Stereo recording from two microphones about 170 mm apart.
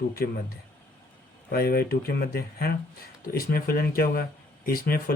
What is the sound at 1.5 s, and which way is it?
Speech, 60° left (ahead or behind).